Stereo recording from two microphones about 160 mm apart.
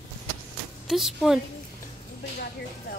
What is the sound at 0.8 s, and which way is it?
Speech, centre (ahead or behind).